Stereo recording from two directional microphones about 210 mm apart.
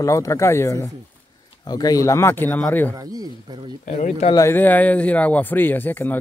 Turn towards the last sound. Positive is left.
turn(degrees=10)  # may be behind; listen again after turning